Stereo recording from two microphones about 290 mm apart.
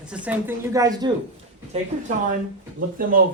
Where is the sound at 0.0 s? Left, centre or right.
Centre.